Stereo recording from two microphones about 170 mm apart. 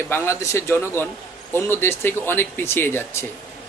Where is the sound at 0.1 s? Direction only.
15° left (ahead or behind).